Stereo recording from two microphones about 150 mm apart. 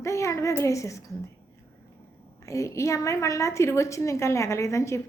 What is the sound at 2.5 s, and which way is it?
A woman's voice, 20° left (ahead or behind).